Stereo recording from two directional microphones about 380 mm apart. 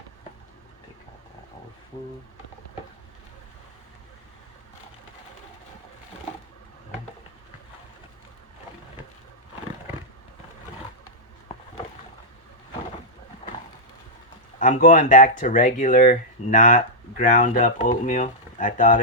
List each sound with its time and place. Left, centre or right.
14.6 s speech: left